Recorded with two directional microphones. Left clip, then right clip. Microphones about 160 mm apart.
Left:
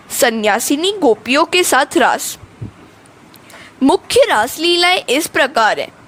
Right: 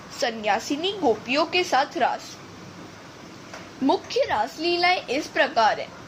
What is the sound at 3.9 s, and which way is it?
A woman's voice, 70° left (ahead or behind).